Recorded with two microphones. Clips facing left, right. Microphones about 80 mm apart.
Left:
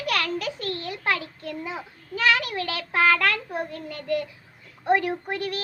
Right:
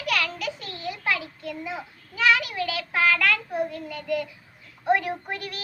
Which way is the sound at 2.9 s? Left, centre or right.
Left.